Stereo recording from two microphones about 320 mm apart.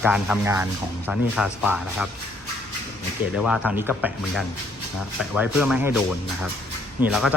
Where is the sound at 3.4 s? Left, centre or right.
Centre.